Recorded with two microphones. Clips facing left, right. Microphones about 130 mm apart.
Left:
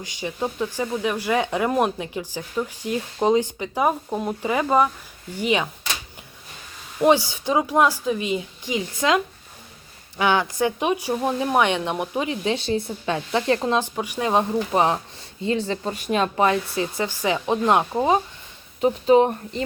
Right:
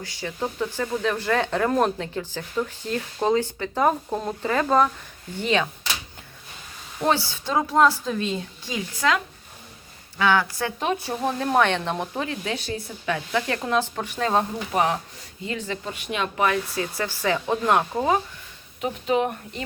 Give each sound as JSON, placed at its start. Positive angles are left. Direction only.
{"t": 0.0, "sound": "speech", "side_deg": 15}
{"t": 7.0, "sound": "speech", "side_deg": 15}
{"t": 14.7, "sound": "speech", "side_deg": 30}
{"t": 18.8, "sound": "speech", "side_deg": 30}